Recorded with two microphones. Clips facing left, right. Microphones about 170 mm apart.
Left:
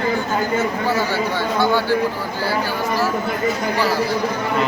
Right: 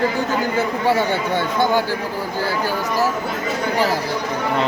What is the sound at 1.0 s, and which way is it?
Speech, 55° right (ahead or behind).